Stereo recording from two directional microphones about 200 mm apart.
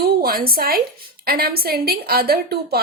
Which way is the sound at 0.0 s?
50° right (ahead or behind).